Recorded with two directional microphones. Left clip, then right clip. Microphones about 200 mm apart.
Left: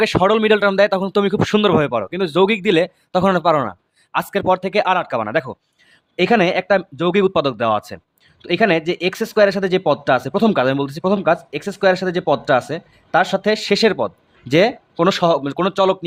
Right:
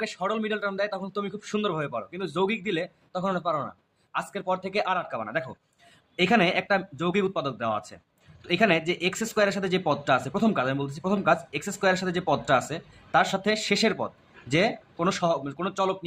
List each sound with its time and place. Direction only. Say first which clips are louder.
0.0 s speech: left 14 dB; 50° left (ahead or behind)